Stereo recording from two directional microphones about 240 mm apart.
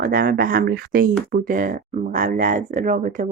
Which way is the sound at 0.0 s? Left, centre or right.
Right.